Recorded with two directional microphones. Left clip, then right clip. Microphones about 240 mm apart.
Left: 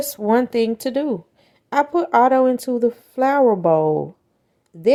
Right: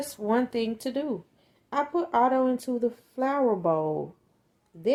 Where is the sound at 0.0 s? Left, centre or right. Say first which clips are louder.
Left 9 dB; left.